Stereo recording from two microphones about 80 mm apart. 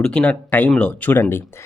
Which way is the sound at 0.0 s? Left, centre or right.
Centre.